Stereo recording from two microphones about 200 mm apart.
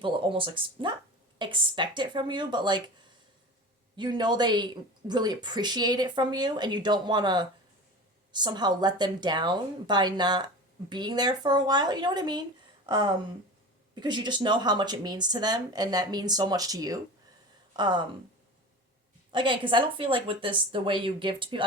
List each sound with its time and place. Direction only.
0.0 s speech: 25° right (ahead or behind)
3.9 s speech: 20° right (ahead or behind)
19.3 s speech: 25° right (ahead or behind)